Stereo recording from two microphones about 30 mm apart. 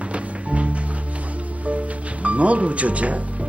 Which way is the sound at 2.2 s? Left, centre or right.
Right.